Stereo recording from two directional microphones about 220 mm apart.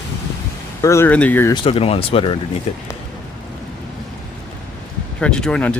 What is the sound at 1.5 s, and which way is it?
Speech, 25° left (ahead or behind).